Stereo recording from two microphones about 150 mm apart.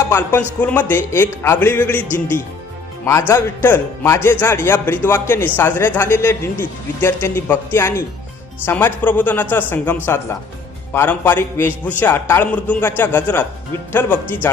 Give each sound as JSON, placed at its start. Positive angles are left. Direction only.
{"t": 0.1, "sound": "a man's voice", "side_deg": 15}
{"t": 3.1, "sound": "a man's voice", "side_deg": 15}